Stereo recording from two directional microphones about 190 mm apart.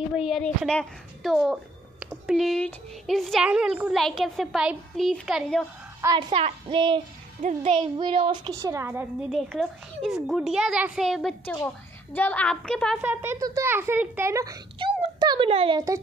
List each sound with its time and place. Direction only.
0.1 s a woman's voice: centre (ahead or behind)
5.9 s a child's voice: 20° right (ahead or behind)
6.3 s a woman's voice: 30° right (ahead or behind)
9.3 s a woman's voice: centre (ahead or behind)
13.0 s a child's voice: 10° right (ahead or behind); by 15.8 s 30° right (ahead or behind)